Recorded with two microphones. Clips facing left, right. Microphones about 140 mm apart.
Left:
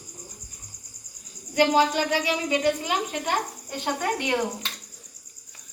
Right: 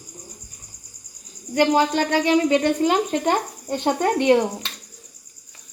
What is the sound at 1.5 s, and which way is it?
Speech, 45° right (ahead or behind).